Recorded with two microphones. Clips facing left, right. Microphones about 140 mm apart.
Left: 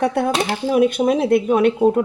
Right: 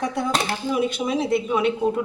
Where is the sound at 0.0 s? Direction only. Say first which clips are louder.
Left 5 dB; 60° left (ahead or behind).